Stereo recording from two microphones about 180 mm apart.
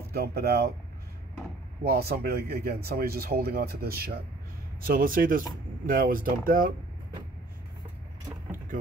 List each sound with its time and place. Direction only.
0.1 s speech: 60° right (ahead or behind)
1.9 s speech: 60° right (ahead or behind)